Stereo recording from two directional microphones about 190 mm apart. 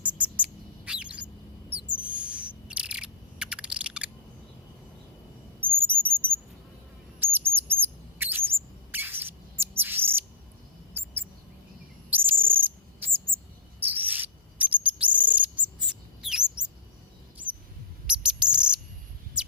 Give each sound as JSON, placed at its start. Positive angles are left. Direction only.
{"t": 0.0, "sound": "bird", "side_deg": -5}
{"t": 1.9, "sound": "owl", "side_deg": -5}
{"t": 5.5, "sound": "a sound", "side_deg": -10}
{"t": 7.2, "sound": "bird", "side_deg": -10}
{"t": 8.2, "sound": "a sound", "side_deg": -10}
{"t": 8.9, "sound": "bird", "side_deg": -10}
{"t": 12.1, "sound": "owl", "side_deg": -10}
{"t": 13.2, "sound": "cricket", "side_deg": -10}
{"t": 14.8, "sound": "bird", "side_deg": -5}
{"t": 16.2, "sound": "a sound", "side_deg": -5}
{"t": 18.0, "sound": "bird", "side_deg": -5}